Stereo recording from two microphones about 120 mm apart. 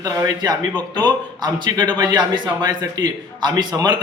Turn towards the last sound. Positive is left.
turn(degrees=-35)  # may be behind; listen again after turning